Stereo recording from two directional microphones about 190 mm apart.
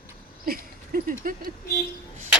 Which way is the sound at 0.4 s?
50° right (ahead or behind).